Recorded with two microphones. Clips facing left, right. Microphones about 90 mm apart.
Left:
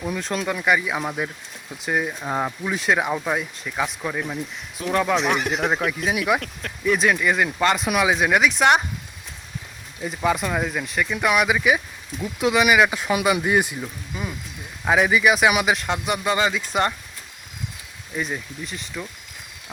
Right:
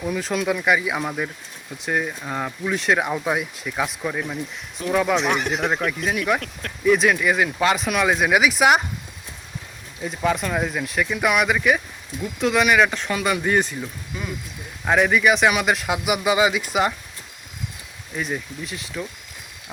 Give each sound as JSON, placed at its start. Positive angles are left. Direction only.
{"t": 0.0, "sound": "speech", "side_deg": 0}
{"t": 2.2, "sound": "speech", "side_deg": 15}
{"t": 2.6, "sound": "speech", "side_deg": 0}
{"t": 10.0, "sound": "speech", "side_deg": 5}
{"t": 14.8, "sound": "speech", "side_deg": 5}
{"t": 18.2, "sound": "speech", "side_deg": 0}